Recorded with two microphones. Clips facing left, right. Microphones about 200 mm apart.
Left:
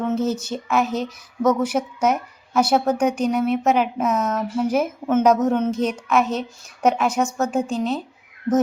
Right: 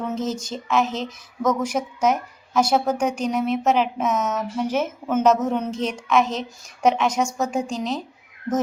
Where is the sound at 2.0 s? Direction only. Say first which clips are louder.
Right 2 dB; 10° left (ahead or behind).